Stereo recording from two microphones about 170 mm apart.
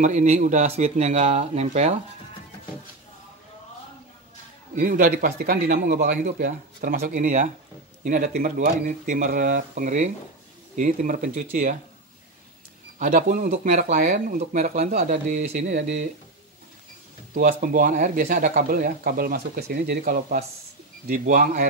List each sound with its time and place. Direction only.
0.0 s speech: 45° right (ahead or behind)
4.7 s speech: 55° right (ahead or behind)
13.0 s speech: 45° right (ahead or behind)
17.3 s speech: 55° right (ahead or behind)